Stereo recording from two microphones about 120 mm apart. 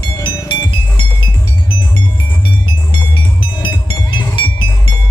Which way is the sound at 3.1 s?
40° left (ahead or behind).